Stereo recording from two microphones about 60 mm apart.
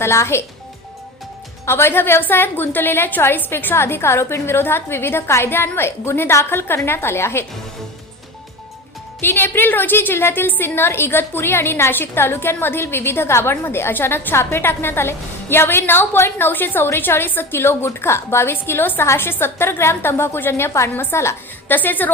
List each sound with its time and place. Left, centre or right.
0.0 s a woman's voice: left
1.6 s a woman's voice: left
9.2 s a woman's voice: left
20.9 s a woman's voice: left
21.7 s a woman's voice: left